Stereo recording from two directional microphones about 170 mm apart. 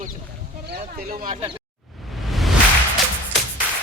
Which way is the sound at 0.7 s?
60° right (ahead or behind).